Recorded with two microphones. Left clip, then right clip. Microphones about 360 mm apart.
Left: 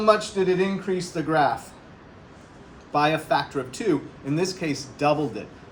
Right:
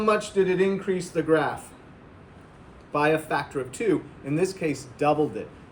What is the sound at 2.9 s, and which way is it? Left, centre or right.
A man's voice, centre.